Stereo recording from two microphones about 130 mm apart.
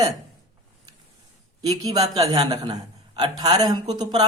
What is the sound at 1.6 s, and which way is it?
Speech, 30° right (ahead or behind).